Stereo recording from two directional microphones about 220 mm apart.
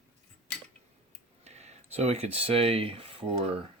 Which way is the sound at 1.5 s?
30° right (ahead or behind).